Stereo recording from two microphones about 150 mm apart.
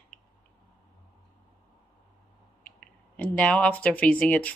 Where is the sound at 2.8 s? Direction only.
10° left (ahead or behind).